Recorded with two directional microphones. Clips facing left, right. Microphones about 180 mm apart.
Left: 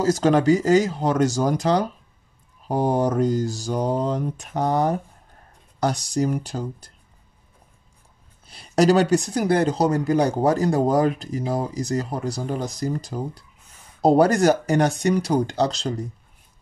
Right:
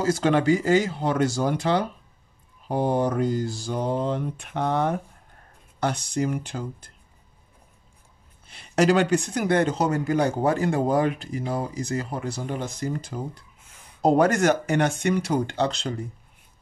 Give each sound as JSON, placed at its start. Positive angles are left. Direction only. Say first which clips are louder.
{"t": 0.0, "sound": "speech", "louder": "left 3 dB", "side_deg": 40}
{"t": 8.5, "sound": "speech", "louder": "left 3 dB", "side_deg": 35}